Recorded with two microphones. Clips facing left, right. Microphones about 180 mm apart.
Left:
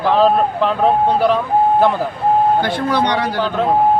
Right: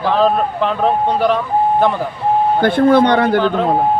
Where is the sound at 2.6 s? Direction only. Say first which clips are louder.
Right 6 dB; 55° right (ahead or behind).